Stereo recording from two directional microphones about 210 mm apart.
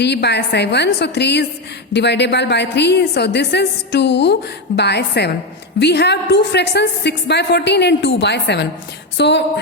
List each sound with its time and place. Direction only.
0.0 s a woman's voice: 55° left (ahead or behind)